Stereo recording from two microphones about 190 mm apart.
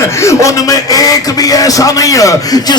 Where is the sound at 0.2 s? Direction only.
15° left (ahead or behind).